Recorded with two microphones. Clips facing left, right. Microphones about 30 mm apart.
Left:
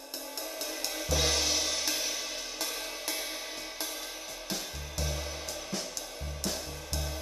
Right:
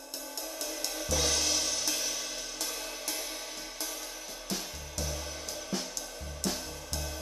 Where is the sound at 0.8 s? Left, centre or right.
Centre.